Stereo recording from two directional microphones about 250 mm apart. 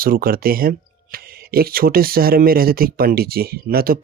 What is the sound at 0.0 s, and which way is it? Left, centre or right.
Speech, right.